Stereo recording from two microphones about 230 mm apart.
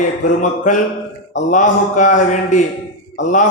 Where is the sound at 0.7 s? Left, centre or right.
Left.